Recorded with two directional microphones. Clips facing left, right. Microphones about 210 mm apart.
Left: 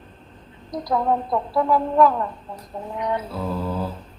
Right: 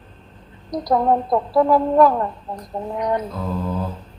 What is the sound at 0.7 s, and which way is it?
A woman's voice, 40° right (ahead or behind).